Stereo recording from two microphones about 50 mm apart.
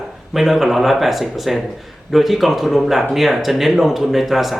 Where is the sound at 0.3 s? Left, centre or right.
Centre.